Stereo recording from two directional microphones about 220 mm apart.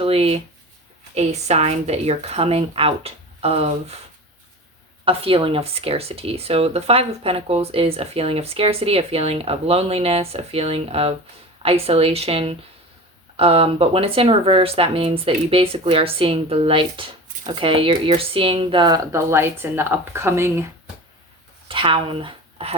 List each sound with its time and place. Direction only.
0.0 s speech: 25° right (ahead or behind)
5.0 s speech: 25° right (ahead or behind)
21.7 s speech: 25° right (ahead or behind)